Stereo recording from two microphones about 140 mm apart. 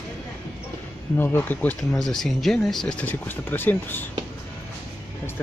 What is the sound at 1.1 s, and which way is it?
Speech, 15° left (ahead or behind).